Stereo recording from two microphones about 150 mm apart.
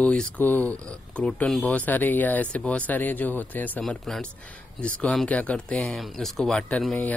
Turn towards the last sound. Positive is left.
turn(degrees=10)  # may be behind; listen again after turning